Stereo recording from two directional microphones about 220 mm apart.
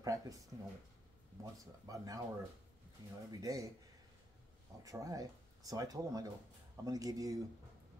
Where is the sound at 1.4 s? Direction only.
15° right (ahead or behind).